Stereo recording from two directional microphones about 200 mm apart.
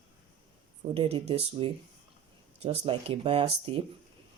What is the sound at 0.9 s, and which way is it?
Speech, 30° right (ahead or behind).